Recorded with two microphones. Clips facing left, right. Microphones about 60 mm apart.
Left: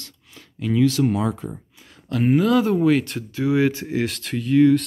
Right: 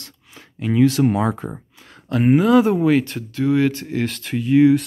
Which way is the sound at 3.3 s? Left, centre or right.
Centre.